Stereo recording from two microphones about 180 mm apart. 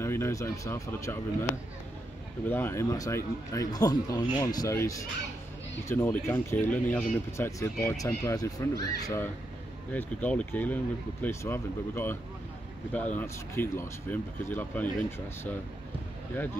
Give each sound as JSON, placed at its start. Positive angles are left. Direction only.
{"t": 0.0, "sound": "speech", "side_deg": 15}
{"t": 2.4, "sound": "speech", "side_deg": 10}